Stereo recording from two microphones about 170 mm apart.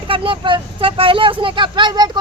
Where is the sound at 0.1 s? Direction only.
30° right (ahead or behind).